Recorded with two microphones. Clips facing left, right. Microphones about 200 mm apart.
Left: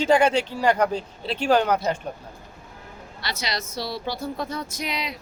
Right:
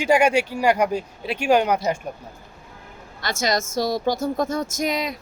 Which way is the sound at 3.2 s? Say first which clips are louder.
Right 7 dB; 45° right (ahead or behind).